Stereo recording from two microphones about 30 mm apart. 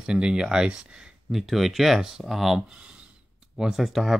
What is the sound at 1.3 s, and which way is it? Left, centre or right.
Speech, centre.